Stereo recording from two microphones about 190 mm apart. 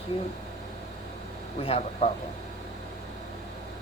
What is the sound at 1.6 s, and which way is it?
Speech, 35° left (ahead or behind).